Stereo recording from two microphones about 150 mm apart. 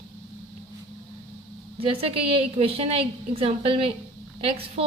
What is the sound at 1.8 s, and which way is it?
A woman's voice, 40° right (ahead or behind).